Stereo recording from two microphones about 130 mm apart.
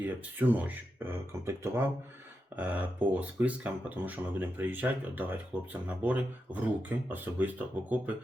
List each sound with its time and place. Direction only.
0.0 s speech: 15° right (ahead or behind)